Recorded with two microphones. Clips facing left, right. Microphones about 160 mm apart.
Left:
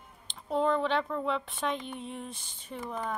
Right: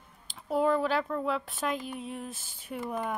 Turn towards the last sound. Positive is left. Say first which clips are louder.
# right 3 dB
turn(degrees=-10)  # may be behind; listen again after turning